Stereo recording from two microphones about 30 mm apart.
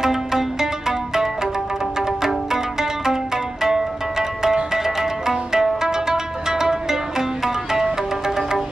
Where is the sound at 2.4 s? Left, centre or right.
Centre.